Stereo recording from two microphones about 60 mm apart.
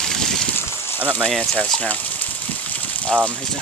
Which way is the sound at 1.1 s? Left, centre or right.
Centre.